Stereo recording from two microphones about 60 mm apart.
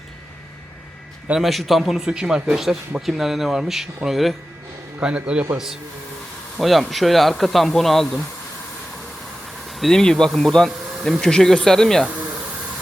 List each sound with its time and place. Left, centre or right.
1.4 s speech: centre
5.0 s a man's voice: centre
6.6 s speech: centre
9.6 s speech: centre